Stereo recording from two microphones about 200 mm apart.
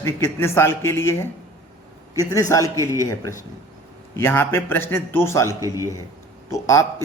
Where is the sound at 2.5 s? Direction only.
15° left (ahead or behind).